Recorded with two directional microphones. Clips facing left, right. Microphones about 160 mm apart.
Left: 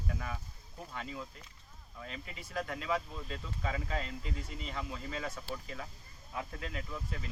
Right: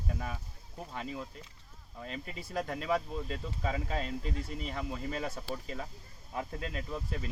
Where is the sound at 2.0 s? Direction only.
35° right (ahead or behind).